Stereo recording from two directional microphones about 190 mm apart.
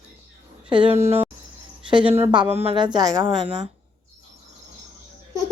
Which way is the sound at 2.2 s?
25° right (ahead or behind).